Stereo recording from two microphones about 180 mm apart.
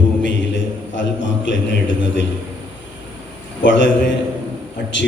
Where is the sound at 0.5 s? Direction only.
90° left.